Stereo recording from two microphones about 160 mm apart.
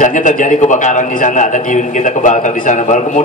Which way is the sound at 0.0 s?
50° left (ahead or behind).